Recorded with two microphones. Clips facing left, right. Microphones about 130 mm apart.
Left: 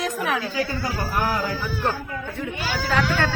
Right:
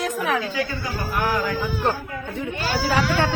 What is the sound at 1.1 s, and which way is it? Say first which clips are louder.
Music: right 2 dB; 35° left (ahead or behind).